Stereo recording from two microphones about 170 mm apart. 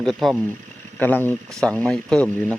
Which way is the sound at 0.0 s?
Centre (ahead or behind).